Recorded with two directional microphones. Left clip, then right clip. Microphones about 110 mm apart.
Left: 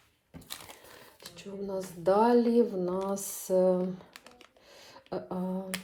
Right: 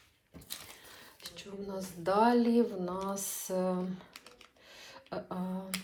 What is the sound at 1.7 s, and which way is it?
Speech, 40° left (ahead or behind).